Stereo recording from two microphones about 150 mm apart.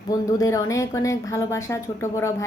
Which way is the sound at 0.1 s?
20° left (ahead or behind).